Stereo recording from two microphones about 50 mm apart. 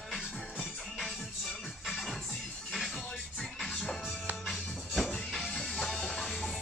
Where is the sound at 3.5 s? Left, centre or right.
Centre.